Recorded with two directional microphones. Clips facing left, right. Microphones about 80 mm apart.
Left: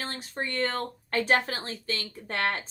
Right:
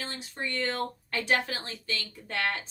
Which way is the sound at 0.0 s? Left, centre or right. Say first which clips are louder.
Left 2 dB; left.